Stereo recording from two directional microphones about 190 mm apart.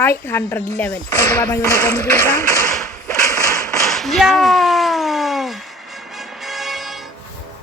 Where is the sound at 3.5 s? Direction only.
5° left (ahead or behind).